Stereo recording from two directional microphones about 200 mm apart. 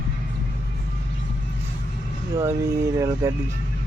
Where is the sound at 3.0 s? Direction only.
15° right (ahead or behind).